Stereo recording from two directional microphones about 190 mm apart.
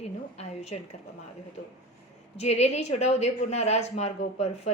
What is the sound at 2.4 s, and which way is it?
A woman's voice, 35° left (ahead or behind).